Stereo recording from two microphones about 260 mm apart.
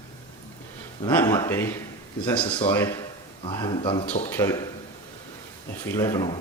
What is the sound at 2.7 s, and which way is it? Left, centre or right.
Speech, centre.